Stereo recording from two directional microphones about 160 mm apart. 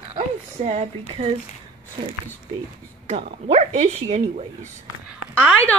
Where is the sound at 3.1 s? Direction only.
40° right (ahead or behind).